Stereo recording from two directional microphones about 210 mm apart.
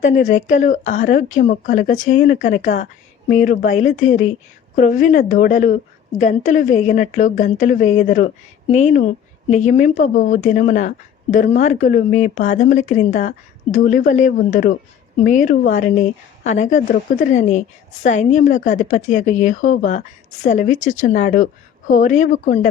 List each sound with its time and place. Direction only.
0.0 s speech: 35° left (ahead or behind)